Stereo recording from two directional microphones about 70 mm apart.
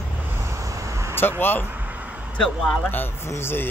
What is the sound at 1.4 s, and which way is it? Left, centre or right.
Chopping, left.